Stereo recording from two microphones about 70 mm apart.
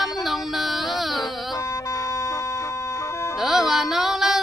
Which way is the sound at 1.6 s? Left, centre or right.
Left.